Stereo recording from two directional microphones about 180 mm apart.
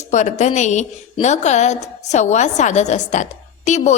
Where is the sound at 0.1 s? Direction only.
40° left (ahead or behind).